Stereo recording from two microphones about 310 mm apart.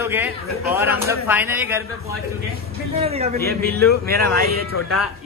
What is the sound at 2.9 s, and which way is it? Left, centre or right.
Speech, centre.